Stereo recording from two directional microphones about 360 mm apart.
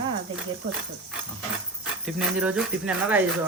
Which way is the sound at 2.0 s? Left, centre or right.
Centre.